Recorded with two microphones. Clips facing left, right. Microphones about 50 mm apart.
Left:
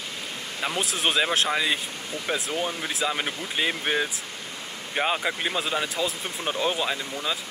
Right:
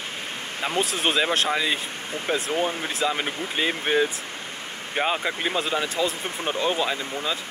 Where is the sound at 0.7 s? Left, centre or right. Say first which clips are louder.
Right 2 dB; centre.